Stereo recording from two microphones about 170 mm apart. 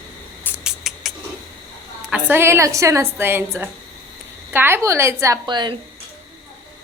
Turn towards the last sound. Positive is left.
turn(degrees=-25)  # may be behind; listen again after turning